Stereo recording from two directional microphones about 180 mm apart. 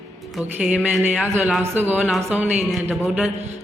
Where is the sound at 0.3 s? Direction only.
5° right (ahead or behind).